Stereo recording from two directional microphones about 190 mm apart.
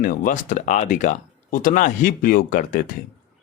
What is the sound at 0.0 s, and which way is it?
Speech, 45° left (ahead or behind).